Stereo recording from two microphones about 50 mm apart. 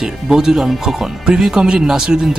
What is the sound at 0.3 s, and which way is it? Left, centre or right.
Speech, centre.